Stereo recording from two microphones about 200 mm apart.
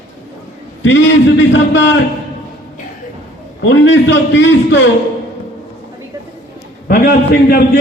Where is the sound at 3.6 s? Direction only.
65° left (ahead or behind).